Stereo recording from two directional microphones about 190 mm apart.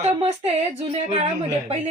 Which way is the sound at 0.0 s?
35° right (ahead or behind).